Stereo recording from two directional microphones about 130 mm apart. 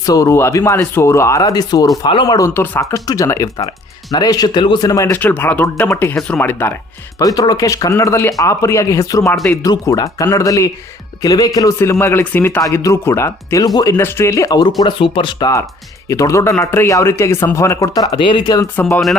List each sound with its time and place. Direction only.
0.0 s speech: 25° left (ahead or behind)
2.5 s speech: 20° left (ahead or behind)
5.1 s speech: 15° left (ahead or behind)
7.2 s speech: 30° left (ahead or behind)
14.8 s speech: 40° left (ahead or behind)
18.8 s speech: 15° left (ahead or behind)